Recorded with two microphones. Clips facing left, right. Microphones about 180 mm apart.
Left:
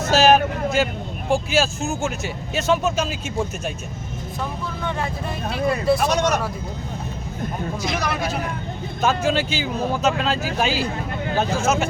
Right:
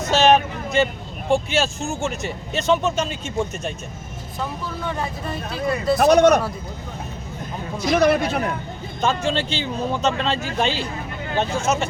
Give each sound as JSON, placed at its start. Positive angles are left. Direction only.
{"t": 0.1, "sound": "speech", "side_deg": 5}
{"t": 6.0, "sound": "speech", "side_deg": -60}
{"t": 7.9, "sound": "speech", "side_deg": -55}
{"t": 9.0, "sound": "speech", "side_deg": 5}